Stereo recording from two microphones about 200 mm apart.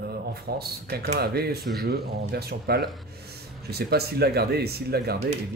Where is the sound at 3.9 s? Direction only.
50° right (ahead or behind).